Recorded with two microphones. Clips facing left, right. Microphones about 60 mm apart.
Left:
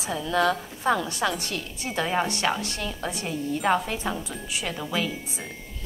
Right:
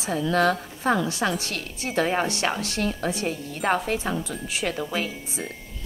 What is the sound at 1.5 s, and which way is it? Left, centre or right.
Speech, right.